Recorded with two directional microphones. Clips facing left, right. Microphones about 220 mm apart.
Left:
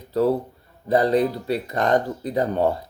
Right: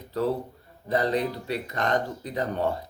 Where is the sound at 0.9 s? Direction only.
35° left (ahead or behind).